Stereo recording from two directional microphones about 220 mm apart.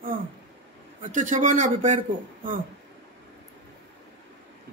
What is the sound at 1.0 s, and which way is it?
A man's voice, 35° right (ahead or behind).